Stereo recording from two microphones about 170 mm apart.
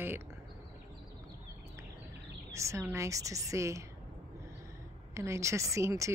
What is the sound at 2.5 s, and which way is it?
Speech, 15° right (ahead or behind).